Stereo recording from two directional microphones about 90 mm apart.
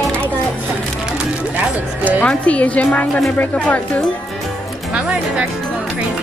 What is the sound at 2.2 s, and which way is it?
A woman's voice, 15° left (ahead or behind).